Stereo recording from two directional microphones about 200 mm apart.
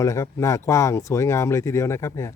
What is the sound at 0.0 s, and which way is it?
Speech, 15° left (ahead or behind).